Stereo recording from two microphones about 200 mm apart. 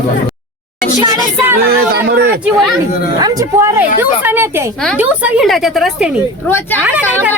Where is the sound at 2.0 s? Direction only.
55° right (ahead or behind).